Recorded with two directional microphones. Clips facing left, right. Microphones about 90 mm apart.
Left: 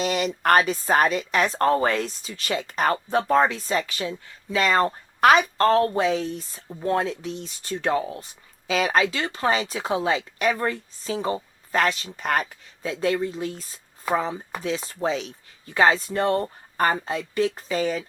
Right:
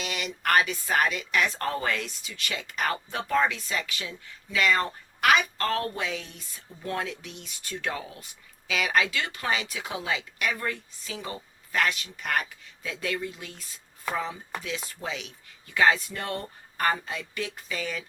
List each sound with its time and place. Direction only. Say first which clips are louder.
0.0 s speech: left 8 dB; 35° left (ahead or behind)